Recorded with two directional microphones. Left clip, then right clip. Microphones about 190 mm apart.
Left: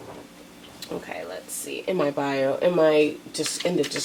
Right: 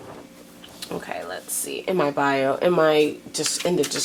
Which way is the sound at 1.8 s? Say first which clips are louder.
Right 3 dB; 20° right (ahead or behind).